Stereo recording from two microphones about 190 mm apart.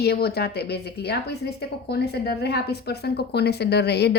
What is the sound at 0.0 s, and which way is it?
A woman's voice, 55° left (ahead or behind).